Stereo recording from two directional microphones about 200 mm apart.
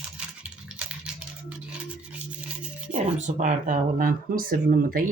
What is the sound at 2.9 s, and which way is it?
Speech, 35° right (ahead or behind).